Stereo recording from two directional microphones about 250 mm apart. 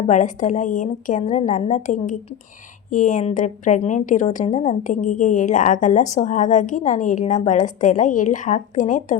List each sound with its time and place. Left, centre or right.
0.1 s a woman's voice: left